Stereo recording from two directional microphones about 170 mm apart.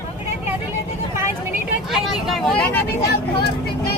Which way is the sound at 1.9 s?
Centre (ahead or behind).